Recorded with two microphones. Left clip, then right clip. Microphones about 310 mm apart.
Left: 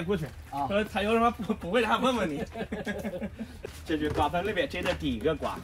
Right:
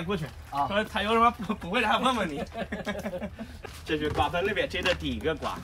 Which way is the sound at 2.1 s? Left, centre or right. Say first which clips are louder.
Right 1 dB; centre.